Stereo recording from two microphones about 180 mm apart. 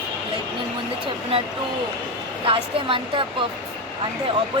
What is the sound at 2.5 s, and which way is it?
Speech, 30° right (ahead or behind).